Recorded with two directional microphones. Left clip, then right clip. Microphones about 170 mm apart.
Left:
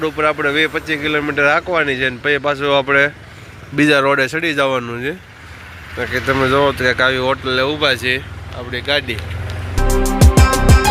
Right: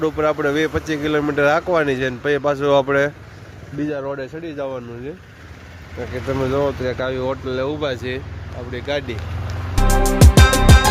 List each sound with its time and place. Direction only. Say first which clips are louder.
0.0 s speech: left 2 dB; 15° right (ahead or behind)
3.8 s speech: left 12 dB; 25° left (ahead or behind)
6.1 s speech: left 6 dB; 5° left (ahead or behind)
9.7 s music: even; centre (ahead or behind)